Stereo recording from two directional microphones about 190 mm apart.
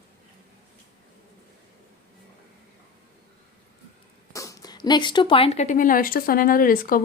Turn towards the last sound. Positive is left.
turn(degrees=50)  # may be behind; listen again after turning